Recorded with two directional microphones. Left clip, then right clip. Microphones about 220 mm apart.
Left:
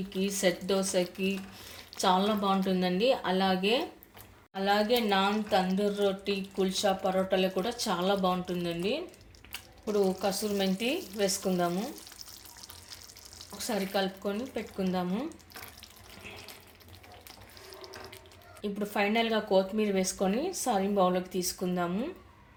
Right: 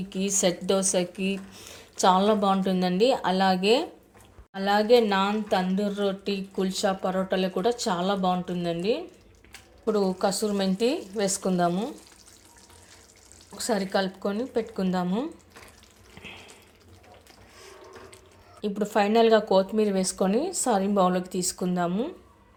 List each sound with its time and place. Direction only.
0.1 s speech: 40° right (ahead or behind)
9.8 s speech: 40° right (ahead or behind)
13.6 s speech: 40° right (ahead or behind)
18.6 s speech: 40° right (ahead or behind)